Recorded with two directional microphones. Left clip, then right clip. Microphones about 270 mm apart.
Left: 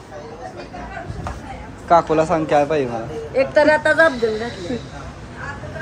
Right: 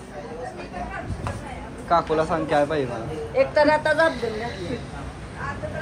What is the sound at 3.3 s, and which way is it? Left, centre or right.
Speech, left.